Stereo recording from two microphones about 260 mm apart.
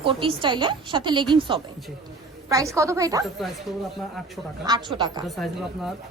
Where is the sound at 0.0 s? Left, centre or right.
Centre.